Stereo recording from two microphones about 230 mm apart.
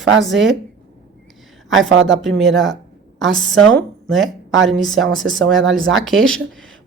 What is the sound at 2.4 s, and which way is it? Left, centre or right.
Speech, centre.